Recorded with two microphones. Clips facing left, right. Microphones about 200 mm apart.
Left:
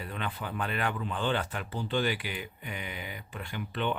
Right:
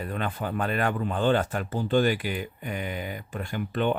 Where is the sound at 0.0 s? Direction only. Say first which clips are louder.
Right 6 dB; 45° right (ahead or behind).